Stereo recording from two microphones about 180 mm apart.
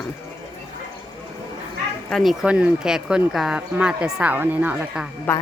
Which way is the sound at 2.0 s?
Centre (ahead or behind).